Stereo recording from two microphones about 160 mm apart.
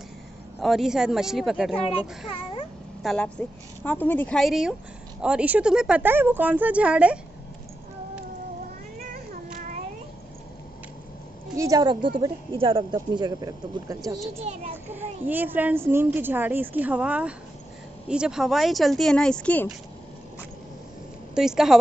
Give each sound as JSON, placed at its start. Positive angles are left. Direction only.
{"t": 0.6, "sound": "a woman's voice", "side_deg": 0}
{"t": 1.9, "sound": "a child's voice", "side_deg": 35}
{"t": 3.0, "sound": "a woman's voice", "side_deg": 5}
{"t": 9.1, "sound": "child singing", "side_deg": -55}
{"t": 11.5, "sound": "a woman's voice", "side_deg": -20}
{"t": 14.4, "sound": "a child's voice", "side_deg": -40}
{"t": 15.0, "sound": "a woman's voice", "side_deg": -10}
{"t": 21.4, "sound": "a woman's voice", "side_deg": -5}